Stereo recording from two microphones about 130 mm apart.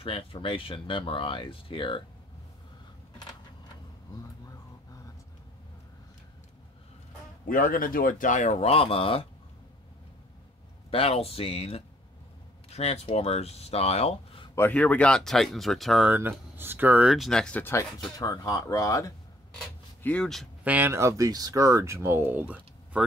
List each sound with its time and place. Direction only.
0.0 s speech: 45° left (ahead or behind)
7.4 s speech: 90° left; by 9.3 s 45° left (ahead or behind)
10.9 s speech: 50° left (ahead or behind)
14.5 s speech: 15° left (ahead or behind)
16.1 s speech: 15° right (ahead or behind); by 17.6 s 5° left (ahead or behind)
17.6 s speech: 20° left (ahead or behind)
20.0 s speech: 10° left (ahead or behind)
20.6 s speech: 15° right (ahead or behind)